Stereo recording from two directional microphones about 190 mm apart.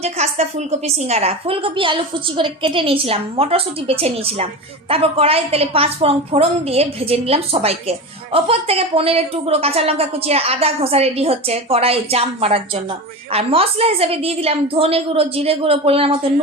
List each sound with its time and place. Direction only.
0.0 s a woman's voice: 35° right (ahead or behind)